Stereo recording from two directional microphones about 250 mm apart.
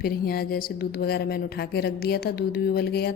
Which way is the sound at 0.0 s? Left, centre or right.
Left.